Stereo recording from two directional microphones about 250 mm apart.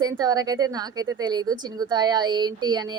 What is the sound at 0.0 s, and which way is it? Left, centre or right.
A woman's voice, centre.